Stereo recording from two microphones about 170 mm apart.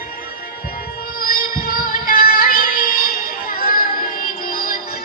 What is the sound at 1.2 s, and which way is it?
Music, 55° left (ahead or behind).